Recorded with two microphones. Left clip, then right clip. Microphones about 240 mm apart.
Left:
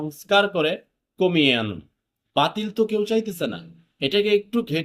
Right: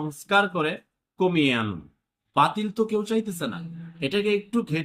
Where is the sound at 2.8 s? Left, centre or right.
Centre.